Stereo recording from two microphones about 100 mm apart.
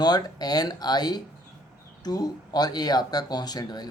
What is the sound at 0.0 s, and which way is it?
Speech, 45° left (ahead or behind).